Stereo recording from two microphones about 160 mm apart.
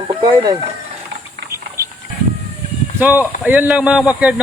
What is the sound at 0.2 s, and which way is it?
Speech, 25° right (ahead or behind).